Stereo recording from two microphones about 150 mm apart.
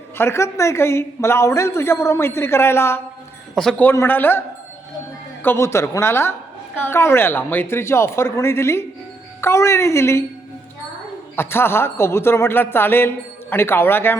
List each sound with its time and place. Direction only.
0.2 s speech: 20° left (ahead or behind)
3.5 s speech: 5° left (ahead or behind)
11.3 s speech: 15° left (ahead or behind)